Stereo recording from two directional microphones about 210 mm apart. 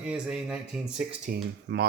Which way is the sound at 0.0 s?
5° right (ahead or behind).